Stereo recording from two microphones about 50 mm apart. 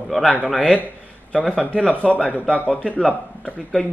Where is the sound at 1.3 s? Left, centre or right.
Left.